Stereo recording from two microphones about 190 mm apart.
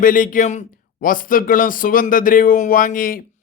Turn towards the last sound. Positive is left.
turn(degrees=45)  # may be behind; listen again after turning